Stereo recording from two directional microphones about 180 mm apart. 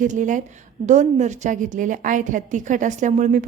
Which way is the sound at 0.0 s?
45° right (ahead or behind).